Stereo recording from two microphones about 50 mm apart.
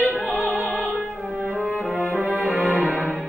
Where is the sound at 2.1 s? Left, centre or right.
Right.